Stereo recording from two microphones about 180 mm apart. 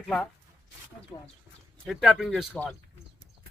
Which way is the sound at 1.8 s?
Centre (ahead or behind).